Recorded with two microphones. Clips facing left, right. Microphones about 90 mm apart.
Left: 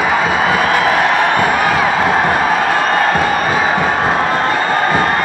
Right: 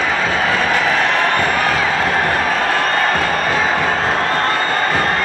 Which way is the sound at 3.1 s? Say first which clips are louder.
Left 3 dB; 15° left (ahead or behind).